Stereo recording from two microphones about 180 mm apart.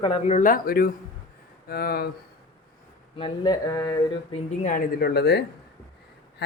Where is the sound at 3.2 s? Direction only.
25° left (ahead or behind).